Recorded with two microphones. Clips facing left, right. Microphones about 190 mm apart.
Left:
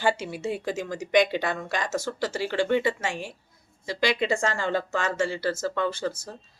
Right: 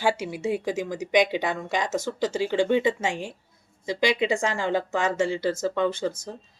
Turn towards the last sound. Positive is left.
turn(degrees=-15)  # may be behind; listen again after turning